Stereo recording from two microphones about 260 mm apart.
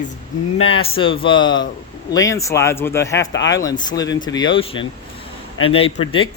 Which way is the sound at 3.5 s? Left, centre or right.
Centre.